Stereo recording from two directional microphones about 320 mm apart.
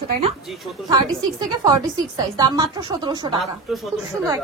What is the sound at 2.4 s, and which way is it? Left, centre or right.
Speech, centre.